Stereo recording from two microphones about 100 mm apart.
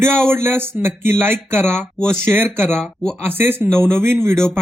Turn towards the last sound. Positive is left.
turn(degrees=-25)  # may be behind; listen again after turning